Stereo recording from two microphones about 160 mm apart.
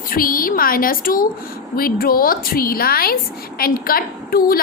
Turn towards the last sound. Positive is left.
turn(degrees=65)  # may be behind; listen again after turning